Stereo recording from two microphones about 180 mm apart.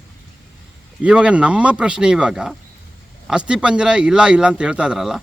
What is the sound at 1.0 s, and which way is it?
A man's voice, 5° right (ahead or behind).